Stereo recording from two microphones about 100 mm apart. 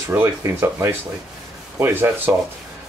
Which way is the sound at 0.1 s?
25° right (ahead or behind).